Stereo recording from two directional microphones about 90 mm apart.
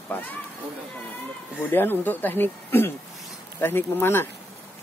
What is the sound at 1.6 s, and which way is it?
Speech, 25° left (ahead or behind).